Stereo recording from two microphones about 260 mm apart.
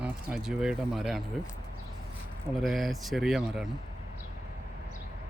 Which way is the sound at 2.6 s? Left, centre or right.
Centre.